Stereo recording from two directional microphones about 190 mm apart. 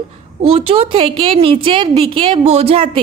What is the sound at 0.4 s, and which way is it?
A woman's voice, 30° right (ahead or behind).